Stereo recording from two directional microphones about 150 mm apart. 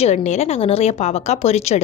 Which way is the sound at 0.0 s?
50° left (ahead or behind).